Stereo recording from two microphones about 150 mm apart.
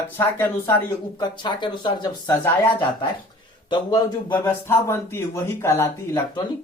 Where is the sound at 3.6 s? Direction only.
30° left (ahead or behind).